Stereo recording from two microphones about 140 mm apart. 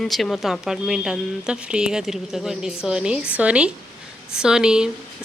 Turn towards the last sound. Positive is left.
turn(degrees=-5)  # may be behind; listen again after turning